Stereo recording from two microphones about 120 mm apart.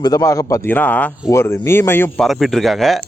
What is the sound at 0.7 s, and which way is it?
Speech, 15° left (ahead or behind).